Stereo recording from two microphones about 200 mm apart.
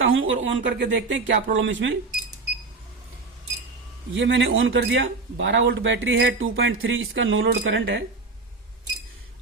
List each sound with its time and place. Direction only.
0.0 s speech: 80° right
4.1 s speech: 65° right (ahead or behind)